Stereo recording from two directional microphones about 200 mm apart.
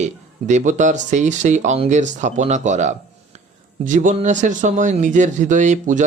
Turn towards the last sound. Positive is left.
turn(degrees=-40)  # may be behind; listen again after turning